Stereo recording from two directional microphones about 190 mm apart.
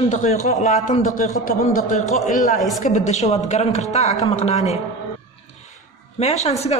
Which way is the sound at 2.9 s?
40° left (ahead or behind).